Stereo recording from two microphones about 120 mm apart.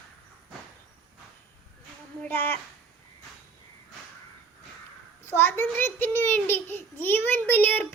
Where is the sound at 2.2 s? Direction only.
15° left (ahead or behind).